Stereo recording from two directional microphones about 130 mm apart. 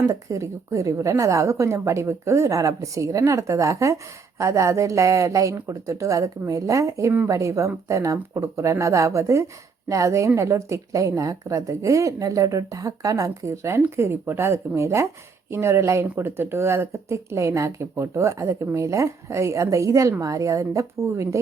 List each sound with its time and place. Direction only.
0.0 s a woman's voice: 25° right (ahead or behind)